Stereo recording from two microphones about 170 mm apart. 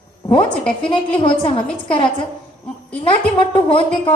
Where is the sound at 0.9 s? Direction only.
30° left (ahead or behind).